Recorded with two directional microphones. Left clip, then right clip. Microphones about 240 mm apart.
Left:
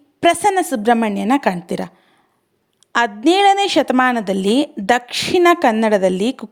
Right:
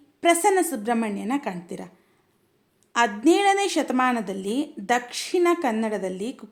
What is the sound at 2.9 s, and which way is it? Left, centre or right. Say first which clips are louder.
A woman's voice: left 5 dB; left.